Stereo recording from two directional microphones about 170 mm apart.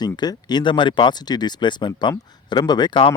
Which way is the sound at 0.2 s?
25° left (ahead or behind).